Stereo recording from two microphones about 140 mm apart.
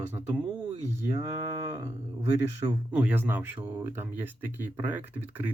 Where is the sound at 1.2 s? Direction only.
25° right (ahead or behind).